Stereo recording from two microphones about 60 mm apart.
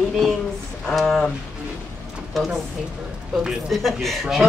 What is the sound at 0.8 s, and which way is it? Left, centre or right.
Speech, centre.